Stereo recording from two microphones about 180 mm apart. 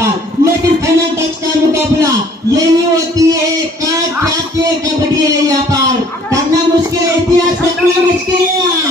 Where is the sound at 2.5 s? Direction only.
20° right (ahead or behind).